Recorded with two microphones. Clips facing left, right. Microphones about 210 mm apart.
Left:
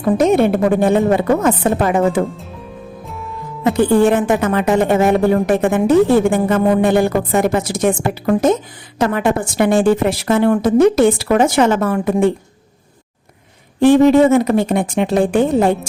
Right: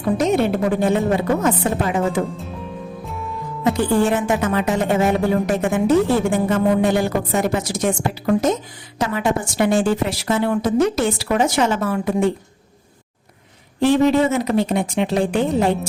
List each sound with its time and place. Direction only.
0.2 s a woman's voice: 55° left (ahead or behind)
3.6 s a woman's voice: 55° left (ahead or behind)
13.7 s a woman's voice: 50° left (ahead or behind)